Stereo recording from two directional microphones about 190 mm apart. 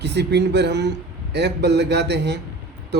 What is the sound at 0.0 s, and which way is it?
Speech, 65° right (ahead or behind).